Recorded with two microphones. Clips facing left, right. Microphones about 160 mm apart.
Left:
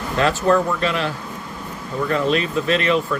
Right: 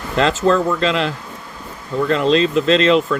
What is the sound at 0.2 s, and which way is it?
Speech, 90° right.